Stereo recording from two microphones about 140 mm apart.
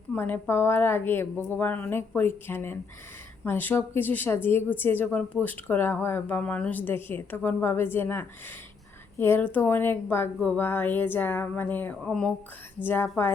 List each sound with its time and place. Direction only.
0.1 s a woman's voice: 15° left (ahead or behind)
12.0 s a sound: 5° left (ahead or behind)
12.8 s a woman's voice: 15° left (ahead or behind)